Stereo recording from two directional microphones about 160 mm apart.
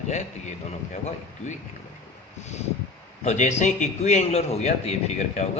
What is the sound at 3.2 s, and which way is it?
A man's voice, 50° left (ahead or behind).